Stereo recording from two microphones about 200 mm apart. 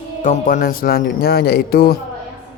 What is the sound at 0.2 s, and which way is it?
Speech, 40° left (ahead or behind).